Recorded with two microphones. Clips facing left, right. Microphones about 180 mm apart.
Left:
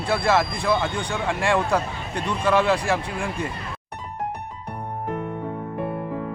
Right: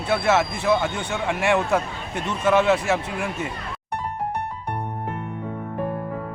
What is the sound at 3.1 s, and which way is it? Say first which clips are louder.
Speech: even; 20° right (ahead or behind).